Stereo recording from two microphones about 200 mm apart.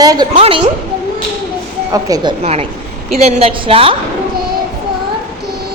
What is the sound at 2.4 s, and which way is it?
A woman's voice, 30° right (ahead or behind).